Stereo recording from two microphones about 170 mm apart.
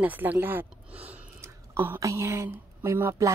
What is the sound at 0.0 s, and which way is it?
Speech, 10° right (ahead or behind).